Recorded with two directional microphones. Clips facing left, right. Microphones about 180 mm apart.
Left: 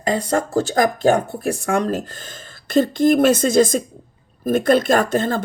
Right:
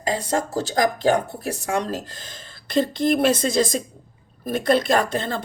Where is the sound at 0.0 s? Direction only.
55° left (ahead or behind).